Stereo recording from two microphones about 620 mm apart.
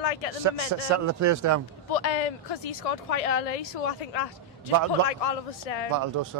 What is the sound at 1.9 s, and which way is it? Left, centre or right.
Speech, left.